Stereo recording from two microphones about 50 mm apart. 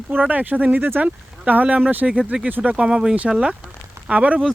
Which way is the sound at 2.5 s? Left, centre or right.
Right.